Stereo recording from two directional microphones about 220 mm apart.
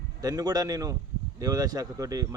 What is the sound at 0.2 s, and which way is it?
A man's voice, 15° right (ahead or behind).